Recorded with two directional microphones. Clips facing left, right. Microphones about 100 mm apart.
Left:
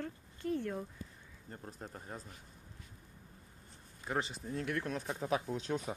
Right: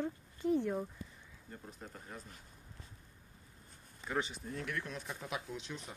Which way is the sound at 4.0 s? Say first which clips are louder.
Left 1 dB; 35° left (ahead or behind).